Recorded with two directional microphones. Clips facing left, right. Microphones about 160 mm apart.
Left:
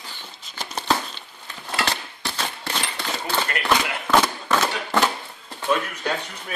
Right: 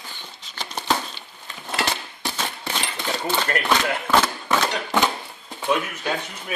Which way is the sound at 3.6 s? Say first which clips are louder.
Right 1 dB; 5° left (ahead or behind).